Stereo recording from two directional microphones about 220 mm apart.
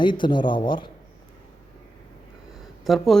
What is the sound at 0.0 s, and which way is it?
Speech, 20° left (ahead or behind).